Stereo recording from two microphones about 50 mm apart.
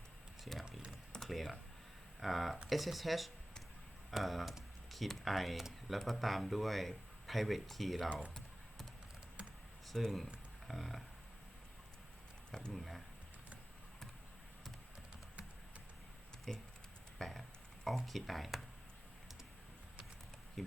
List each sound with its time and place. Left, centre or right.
1.3 s speech: centre
9.4 s computer keyboard: right
9.8 s speech: centre
12.5 s a sound: centre
12.7 s speech: centre
16.5 s speech: centre
17.2 s a sound: centre
17.8 s speech: centre
20.6 s a sound: centre